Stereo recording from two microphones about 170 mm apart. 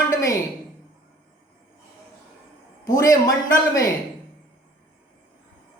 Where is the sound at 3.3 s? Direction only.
20° left (ahead or behind).